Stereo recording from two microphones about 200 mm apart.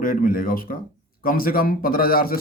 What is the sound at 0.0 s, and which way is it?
Speech, 45° left (ahead or behind).